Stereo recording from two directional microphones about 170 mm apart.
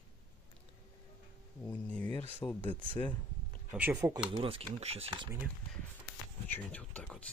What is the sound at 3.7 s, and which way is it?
Speech, 10° right (ahead or behind).